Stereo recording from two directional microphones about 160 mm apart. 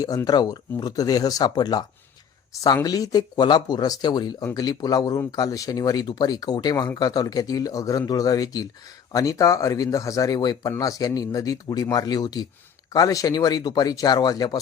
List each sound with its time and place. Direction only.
0.0 s speech: 20° left (ahead or behind)